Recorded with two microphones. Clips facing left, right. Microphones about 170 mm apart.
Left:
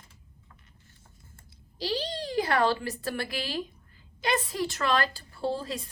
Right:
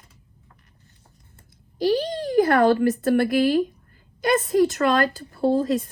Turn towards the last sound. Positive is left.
turn(degrees=-50)  # may be behind; listen again after turning